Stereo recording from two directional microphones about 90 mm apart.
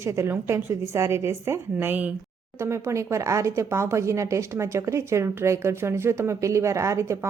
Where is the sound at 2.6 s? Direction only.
30° right (ahead or behind).